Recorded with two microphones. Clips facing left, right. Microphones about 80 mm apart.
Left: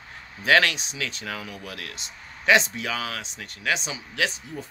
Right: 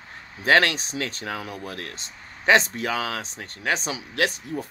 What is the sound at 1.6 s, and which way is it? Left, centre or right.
Speech, right.